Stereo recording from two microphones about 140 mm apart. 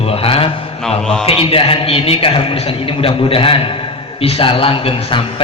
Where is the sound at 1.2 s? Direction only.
45° left (ahead or behind).